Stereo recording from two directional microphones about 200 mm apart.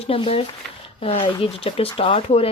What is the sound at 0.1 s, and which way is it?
Speech, 30° left (ahead or behind).